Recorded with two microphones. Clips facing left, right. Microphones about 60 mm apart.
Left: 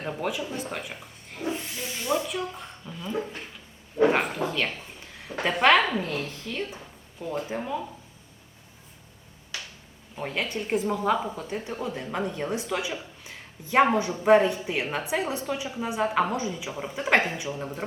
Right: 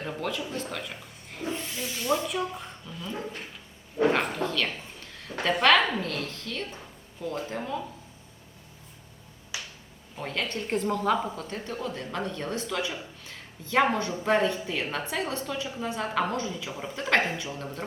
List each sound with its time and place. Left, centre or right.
0.0 s a woman's voice: centre
1.3 s a sound: centre
1.8 s a sound: left
2.0 s speech: centre
2.8 s a woman's voice: centre
5.6 s a woman's voice: centre
9.5 s finger snapping: centre
10.2 s a woman's voice: centre